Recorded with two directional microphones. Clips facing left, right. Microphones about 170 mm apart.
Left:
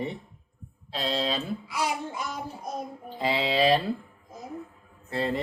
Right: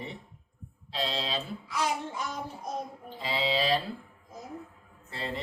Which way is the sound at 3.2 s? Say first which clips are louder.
Left 5 dB; 60° left (ahead or behind).